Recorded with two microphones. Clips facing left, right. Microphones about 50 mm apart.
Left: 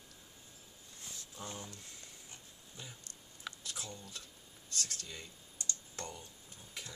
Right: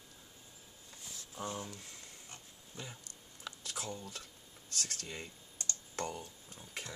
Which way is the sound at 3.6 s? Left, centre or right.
Right.